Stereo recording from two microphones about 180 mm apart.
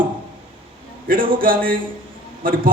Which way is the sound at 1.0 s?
50° right (ahead or behind).